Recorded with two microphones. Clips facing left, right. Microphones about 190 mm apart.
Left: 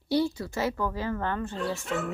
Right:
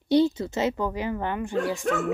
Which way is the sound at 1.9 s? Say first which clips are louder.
Right 5 dB; 55° right (ahead or behind).